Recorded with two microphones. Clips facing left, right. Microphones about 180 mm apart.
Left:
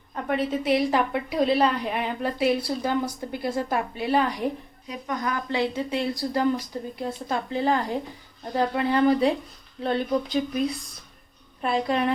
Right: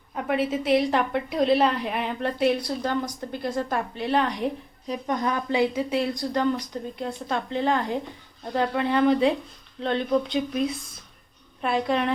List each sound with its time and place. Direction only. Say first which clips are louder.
0.1 s a woman's voice: right 1 dB; 5° right (ahead or behind)
4.9 s speech: right 3 dB; 30° right (ahead or behind)
5.7 s a woman's voice: right 2 dB; centre (ahead or behind)